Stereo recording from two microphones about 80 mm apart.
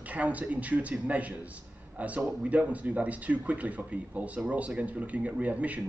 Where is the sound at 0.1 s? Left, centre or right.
Centre.